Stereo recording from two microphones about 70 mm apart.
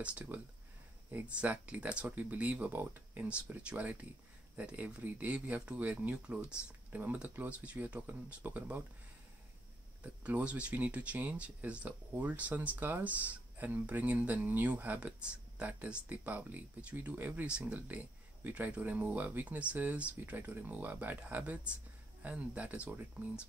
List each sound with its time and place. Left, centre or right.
0.0 s speech: centre
10.2 s speech: centre